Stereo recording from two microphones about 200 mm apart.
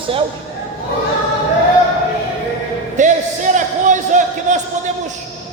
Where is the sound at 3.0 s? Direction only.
40° right (ahead or behind).